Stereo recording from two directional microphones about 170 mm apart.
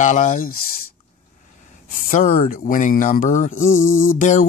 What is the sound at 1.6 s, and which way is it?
Speech, 50° left (ahead or behind).